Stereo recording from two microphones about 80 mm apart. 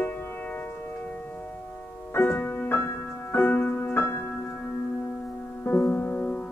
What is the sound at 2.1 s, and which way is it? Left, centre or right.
Music, left.